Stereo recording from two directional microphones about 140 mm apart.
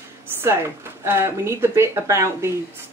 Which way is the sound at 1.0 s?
20° right (ahead or behind).